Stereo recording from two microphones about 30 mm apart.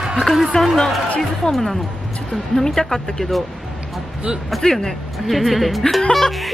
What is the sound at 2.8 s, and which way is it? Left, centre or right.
Speech, centre.